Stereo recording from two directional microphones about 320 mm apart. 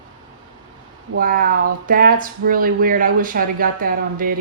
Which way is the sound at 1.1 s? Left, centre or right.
Right.